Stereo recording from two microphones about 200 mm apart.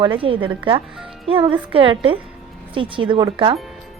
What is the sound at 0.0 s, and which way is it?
A woman's voice, 25° right (ahead or behind).